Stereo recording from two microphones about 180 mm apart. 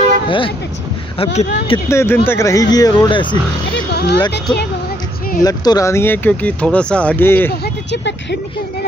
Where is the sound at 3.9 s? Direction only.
70° left (ahead or behind).